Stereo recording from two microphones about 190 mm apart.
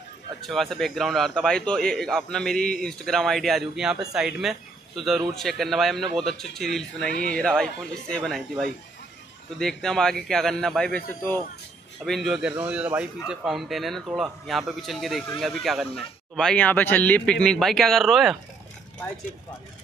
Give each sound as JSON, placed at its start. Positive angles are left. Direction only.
{"t": 0.5, "sound": "speech", "side_deg": 0}
{"t": 12.0, "sound": "speech", "side_deg": 0}